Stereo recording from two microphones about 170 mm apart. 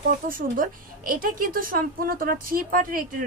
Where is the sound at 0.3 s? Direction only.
55° right (ahead or behind).